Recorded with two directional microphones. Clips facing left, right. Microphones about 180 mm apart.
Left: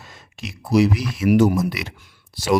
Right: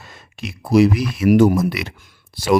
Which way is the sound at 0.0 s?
60° right (ahead or behind).